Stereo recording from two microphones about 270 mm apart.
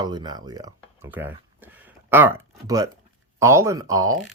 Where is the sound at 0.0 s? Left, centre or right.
Centre.